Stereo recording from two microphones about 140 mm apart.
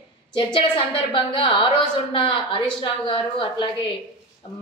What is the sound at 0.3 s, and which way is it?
A woman's voice, 35° left (ahead or behind).